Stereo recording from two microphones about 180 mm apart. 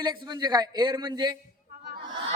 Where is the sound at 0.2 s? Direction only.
20° right (ahead or behind).